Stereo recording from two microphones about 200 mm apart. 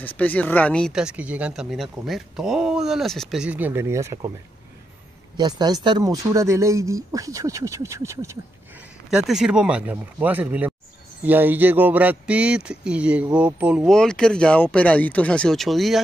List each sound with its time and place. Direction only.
0.0 s speech: 10° left (ahead or behind); by 4.3 s 15° right (ahead or behind)
5.4 s speech: 20° right (ahead or behind)
9.1 s speech: centre (ahead or behind)